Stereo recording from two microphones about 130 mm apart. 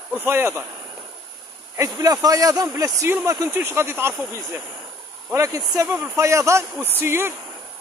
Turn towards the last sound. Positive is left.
turn(degrees=-20)  # may be behind; listen again after turning